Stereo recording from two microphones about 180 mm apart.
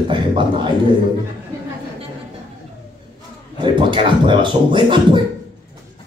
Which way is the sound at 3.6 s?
25° right (ahead or behind).